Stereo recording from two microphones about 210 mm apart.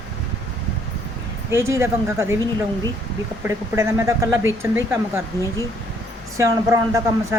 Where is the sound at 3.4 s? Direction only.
10° right (ahead or behind).